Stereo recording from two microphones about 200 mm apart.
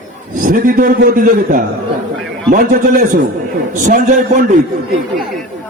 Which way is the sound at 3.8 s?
40° right (ahead or behind).